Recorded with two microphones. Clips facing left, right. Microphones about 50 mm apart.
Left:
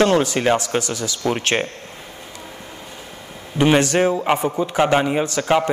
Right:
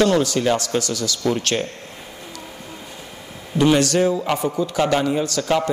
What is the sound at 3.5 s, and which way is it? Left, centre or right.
A man's voice, left.